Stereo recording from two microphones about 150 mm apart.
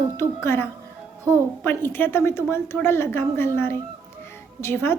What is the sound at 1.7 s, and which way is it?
A woman's voice, 15° left (ahead or behind).